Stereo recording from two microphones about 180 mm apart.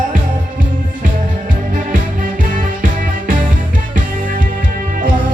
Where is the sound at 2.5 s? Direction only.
45° right (ahead or behind).